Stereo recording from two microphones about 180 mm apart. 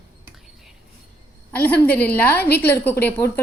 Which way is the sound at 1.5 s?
10° left (ahead or behind).